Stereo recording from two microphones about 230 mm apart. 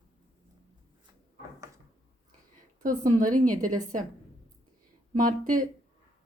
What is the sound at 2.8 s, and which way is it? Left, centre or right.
Speech, right.